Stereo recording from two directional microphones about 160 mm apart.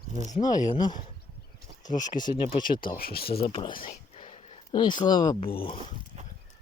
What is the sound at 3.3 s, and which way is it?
Speech, 35° left (ahead or behind).